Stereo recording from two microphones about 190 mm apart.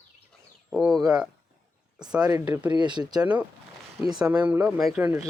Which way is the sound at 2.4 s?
10° right (ahead or behind).